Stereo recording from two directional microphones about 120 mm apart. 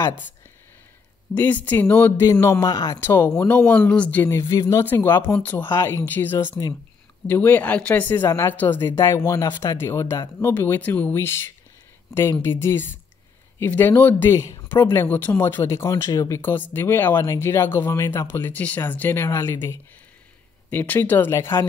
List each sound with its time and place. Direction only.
1.3 s speech: 15° left (ahead or behind)
14.3 s speech: 25° left (ahead or behind)